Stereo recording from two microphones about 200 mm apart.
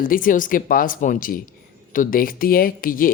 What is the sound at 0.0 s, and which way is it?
Speech, 45° left (ahead or behind).